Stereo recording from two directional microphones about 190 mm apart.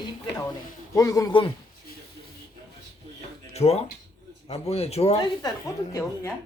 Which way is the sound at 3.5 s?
35° left (ahead or behind).